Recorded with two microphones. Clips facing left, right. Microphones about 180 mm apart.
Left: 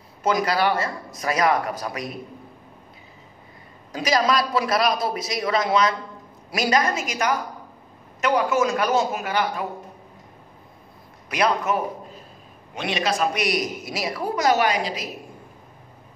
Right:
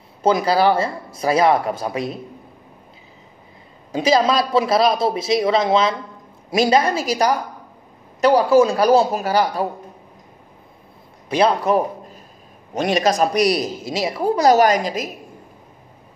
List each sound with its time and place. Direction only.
0.2 s a man's voice: 30° right (ahead or behind)
3.9 s a man's voice: 25° right (ahead or behind)
11.2 s a man's voice: 30° right (ahead or behind)
12.7 s a woman's voice: 40° right (ahead or behind)